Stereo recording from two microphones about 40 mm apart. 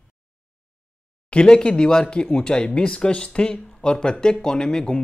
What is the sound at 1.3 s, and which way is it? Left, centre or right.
Speech, left.